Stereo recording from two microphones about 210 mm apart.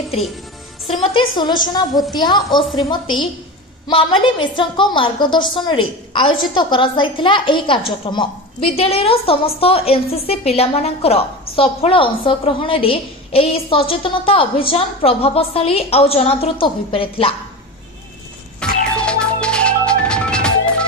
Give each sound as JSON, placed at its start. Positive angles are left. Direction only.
{"t": 1.0, "sound": "a woman's voice", "side_deg": 20}
{"t": 18.6, "sound": "music", "side_deg": 5}